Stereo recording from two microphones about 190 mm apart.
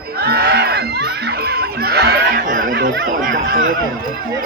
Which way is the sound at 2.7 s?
50° right (ahead or behind).